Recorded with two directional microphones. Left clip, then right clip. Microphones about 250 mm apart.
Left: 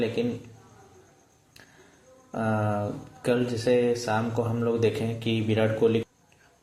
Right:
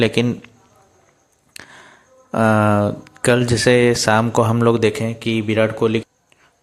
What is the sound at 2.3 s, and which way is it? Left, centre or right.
Speech, right.